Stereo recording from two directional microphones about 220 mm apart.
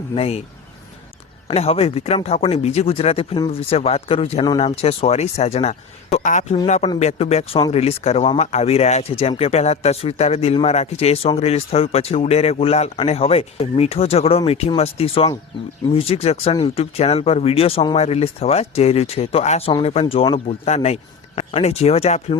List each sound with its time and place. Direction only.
0.1 s speech: 25° left (ahead or behind)
1.5 s speech: 25° left (ahead or behind)